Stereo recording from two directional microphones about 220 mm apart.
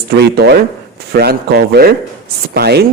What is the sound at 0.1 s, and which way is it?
A woman's voice, 45° right (ahead or behind).